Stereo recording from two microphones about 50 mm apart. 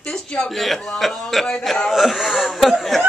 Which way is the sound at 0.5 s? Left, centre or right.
Centre.